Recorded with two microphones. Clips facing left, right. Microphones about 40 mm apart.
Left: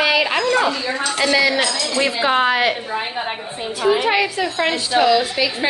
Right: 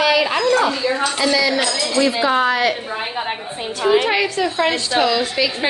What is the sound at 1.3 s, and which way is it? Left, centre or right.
Speech, centre.